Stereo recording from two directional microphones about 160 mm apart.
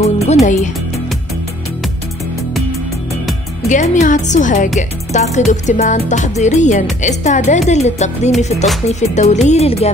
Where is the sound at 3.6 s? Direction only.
50° left (ahead or behind).